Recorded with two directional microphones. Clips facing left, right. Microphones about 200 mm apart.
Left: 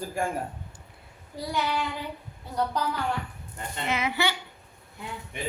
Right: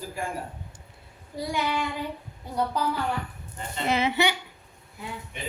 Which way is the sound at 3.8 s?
30° right (ahead or behind).